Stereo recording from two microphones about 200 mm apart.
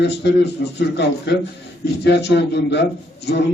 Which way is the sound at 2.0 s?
60° left (ahead or behind).